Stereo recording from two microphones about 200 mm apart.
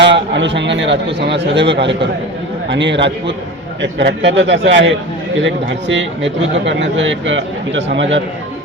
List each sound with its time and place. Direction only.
0.0 s a man's voice: 60° right (ahead or behind)